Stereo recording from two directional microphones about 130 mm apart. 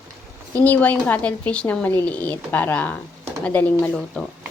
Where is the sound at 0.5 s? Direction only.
10° left (ahead or behind).